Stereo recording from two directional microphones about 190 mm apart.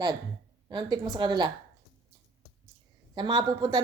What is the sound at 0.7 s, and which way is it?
Speech, 20° right (ahead or behind).